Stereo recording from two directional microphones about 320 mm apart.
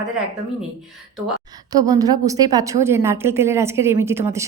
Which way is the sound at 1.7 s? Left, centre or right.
Centre.